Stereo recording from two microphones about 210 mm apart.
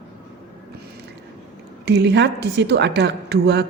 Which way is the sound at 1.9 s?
55° right (ahead or behind).